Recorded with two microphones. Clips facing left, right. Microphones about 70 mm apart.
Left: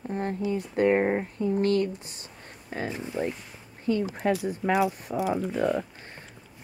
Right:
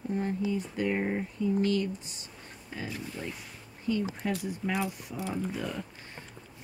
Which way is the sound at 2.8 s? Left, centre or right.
Left.